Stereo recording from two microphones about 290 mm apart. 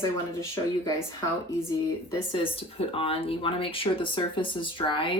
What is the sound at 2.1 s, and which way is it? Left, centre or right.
Speech, centre.